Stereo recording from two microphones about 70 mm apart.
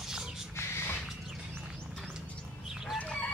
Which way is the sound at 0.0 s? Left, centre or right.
Centre.